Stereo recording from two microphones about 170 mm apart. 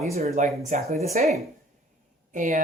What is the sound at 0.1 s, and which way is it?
Speech, 40° right (ahead or behind).